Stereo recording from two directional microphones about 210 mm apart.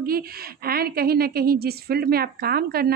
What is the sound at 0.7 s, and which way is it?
A woman's voice, 45° right (ahead or behind).